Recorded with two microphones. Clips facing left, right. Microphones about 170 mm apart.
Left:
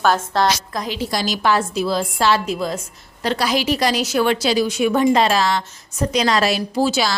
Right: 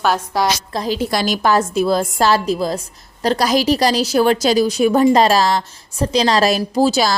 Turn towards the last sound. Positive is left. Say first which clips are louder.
# right 4 dB
turn(degrees=-40)  # may be behind; listen again after turning